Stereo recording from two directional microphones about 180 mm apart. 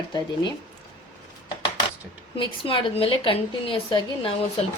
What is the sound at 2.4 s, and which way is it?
A woman's voice, 30° left (ahead or behind).